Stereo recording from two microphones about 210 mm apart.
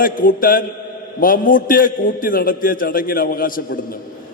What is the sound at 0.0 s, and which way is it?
A man's voice, 40° left (ahead or behind).